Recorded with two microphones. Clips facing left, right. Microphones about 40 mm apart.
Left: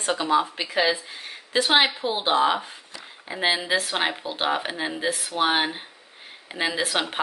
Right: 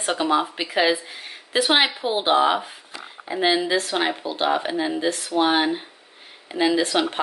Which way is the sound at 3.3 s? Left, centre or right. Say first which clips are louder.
Right 3 dB; centre.